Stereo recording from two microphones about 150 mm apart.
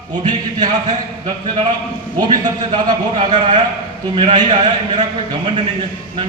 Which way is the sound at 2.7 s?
30° right (ahead or behind).